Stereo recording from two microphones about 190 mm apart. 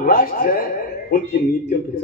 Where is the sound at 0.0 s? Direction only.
50° left (ahead or behind).